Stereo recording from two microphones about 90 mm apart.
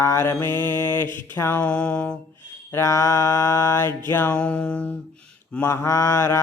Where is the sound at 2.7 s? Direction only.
35° left (ahead or behind).